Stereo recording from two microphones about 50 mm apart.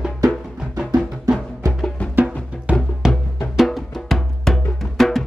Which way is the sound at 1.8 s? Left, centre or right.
Left.